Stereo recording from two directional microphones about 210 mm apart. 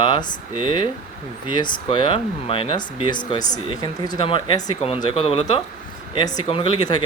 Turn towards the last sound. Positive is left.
turn(degrees=20)  # may be behind; listen again after turning